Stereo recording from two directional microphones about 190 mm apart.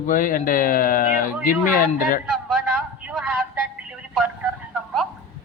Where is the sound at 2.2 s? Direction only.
Centre (ahead or behind).